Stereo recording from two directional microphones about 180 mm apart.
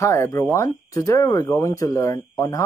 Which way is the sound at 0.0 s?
15° left (ahead or behind).